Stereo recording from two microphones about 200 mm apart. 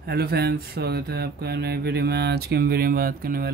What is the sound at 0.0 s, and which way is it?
Speech, 50° right (ahead or behind).